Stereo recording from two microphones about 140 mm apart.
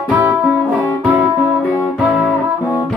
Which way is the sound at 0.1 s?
10° right (ahead or behind).